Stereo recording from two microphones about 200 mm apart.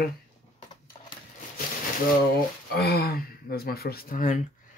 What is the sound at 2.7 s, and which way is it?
Speech, 50° left (ahead or behind).